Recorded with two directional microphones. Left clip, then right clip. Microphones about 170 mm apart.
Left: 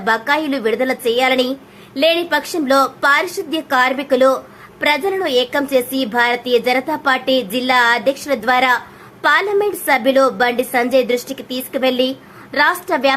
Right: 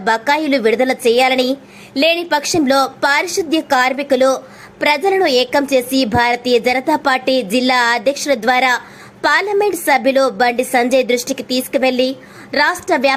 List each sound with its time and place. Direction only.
0.0 s a woman's voice: 25° right (ahead or behind)